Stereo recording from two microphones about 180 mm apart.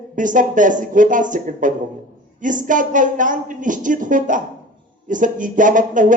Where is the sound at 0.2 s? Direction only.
45° right (ahead or behind).